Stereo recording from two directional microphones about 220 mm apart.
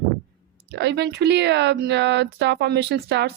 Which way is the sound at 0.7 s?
50° right (ahead or behind).